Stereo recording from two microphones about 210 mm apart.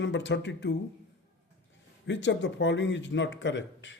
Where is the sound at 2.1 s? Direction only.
60° left (ahead or behind).